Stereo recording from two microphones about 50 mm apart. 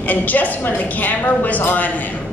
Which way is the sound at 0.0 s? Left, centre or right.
Left.